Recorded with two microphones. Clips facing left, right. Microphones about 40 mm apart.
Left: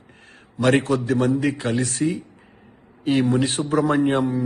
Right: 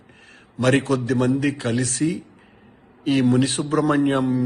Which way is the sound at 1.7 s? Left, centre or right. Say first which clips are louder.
Even; left.